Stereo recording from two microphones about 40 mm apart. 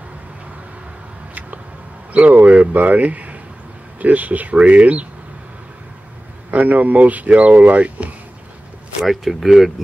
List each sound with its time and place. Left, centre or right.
2.1 s speech: right
6.5 s speech: right
9.0 s speech: centre